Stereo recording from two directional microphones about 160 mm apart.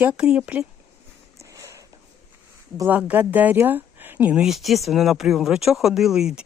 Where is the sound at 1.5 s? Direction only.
20° right (ahead or behind).